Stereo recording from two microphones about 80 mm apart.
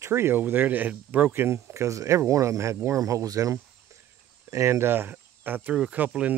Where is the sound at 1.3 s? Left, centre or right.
Right.